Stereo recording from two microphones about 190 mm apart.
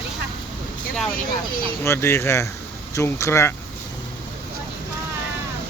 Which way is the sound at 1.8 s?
15° left (ahead or behind).